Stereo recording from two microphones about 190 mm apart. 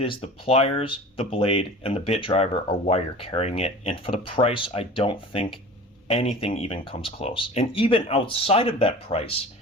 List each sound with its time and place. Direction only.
0.0 s speech: 30° left (ahead or behind)